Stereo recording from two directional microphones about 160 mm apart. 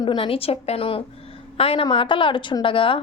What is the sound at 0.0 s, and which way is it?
A woman's voice, 30° left (ahead or behind).